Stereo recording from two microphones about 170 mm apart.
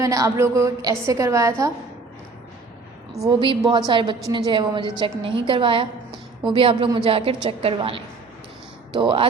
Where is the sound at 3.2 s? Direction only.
30° right (ahead or behind).